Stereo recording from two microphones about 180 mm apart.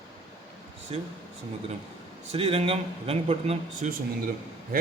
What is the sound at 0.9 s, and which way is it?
Speech, 30° right (ahead or behind).